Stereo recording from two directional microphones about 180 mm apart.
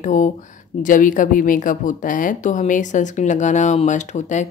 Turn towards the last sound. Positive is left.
turn(degrees=40)  # may be behind; listen again after turning